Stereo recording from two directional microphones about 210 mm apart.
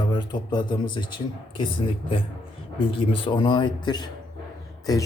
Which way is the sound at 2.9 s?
25° left (ahead or behind).